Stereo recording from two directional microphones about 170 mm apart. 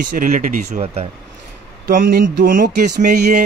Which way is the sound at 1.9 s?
55° right (ahead or behind).